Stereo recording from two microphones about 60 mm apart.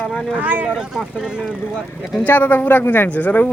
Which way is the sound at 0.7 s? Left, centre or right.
Centre.